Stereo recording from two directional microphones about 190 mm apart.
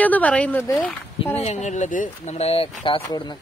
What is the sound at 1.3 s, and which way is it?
Speech, 35° left (ahead or behind).